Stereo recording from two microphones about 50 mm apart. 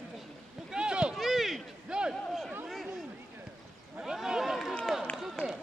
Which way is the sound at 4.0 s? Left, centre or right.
Centre.